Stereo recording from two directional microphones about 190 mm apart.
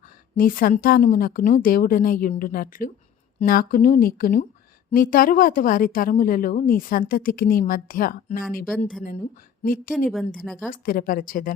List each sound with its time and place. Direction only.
0.3 s a woman's voice: 50° left (ahead or behind)
9.6 s a woman's voice: 45° left (ahead or behind)
10.1 s a woman's voice: centre (ahead or behind)
10.7 s a woman's voice: 50° left (ahead or behind)